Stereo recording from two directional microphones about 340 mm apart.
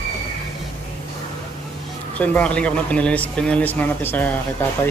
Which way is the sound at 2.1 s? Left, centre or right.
Centre.